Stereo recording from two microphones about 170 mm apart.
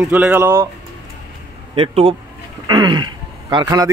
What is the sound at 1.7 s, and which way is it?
Speech, 35° right (ahead or behind).